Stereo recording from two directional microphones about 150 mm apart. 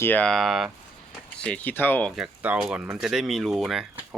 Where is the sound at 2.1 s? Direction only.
5° right (ahead or behind).